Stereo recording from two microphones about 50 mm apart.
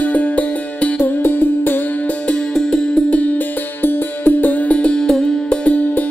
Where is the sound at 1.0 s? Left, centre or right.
Left.